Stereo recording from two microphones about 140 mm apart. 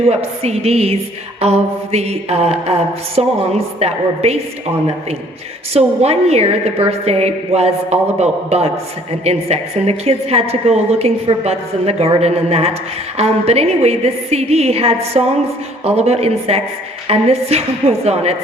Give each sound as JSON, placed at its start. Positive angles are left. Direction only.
{"t": 0.1, "sound": "a woman's voice", "side_deg": -50}
{"t": 5.7, "sound": "a woman's voice", "side_deg": -50}